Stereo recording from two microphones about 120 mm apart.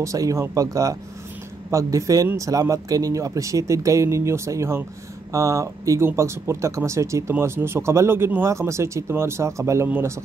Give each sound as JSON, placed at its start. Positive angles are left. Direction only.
{"t": 0.0, "sound": "speech", "side_deg": -25}